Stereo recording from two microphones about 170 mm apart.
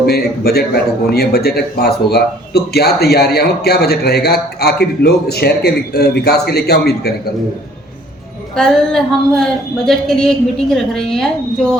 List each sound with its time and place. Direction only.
0.0 s speech: 65° left (ahead or behind)
8.5 s speech: 5° left (ahead or behind)